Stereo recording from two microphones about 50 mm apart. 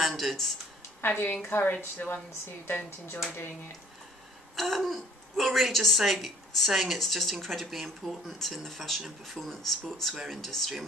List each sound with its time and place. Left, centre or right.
0.0 s a sound: centre
1.0 s a woman's voice: left
4.6 s a woman's voice: centre